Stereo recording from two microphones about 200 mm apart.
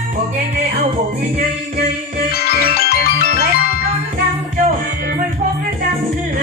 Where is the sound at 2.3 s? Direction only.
50° left (ahead or behind).